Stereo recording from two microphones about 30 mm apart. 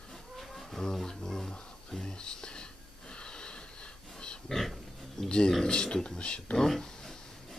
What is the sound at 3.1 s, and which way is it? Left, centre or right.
Snort, left.